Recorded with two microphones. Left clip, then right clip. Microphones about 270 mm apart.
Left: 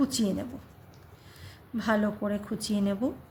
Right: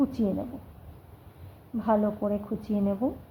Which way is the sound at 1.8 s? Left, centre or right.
Left.